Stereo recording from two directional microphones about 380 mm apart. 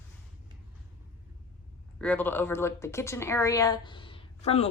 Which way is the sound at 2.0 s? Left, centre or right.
Centre.